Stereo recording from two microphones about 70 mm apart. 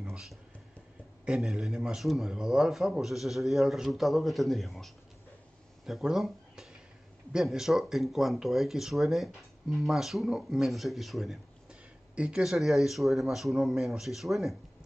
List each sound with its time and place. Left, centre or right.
0.1 s a man's voice: centre
12.2 s speech: centre
12.4 s a man's voice: centre